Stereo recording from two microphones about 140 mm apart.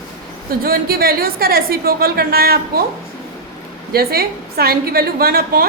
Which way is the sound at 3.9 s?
90° right.